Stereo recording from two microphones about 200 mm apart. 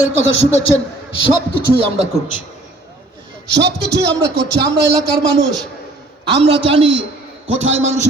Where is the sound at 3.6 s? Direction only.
55° right (ahead or behind).